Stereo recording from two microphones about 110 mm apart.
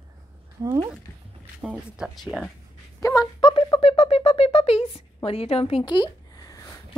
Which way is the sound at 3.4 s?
55° left (ahead or behind).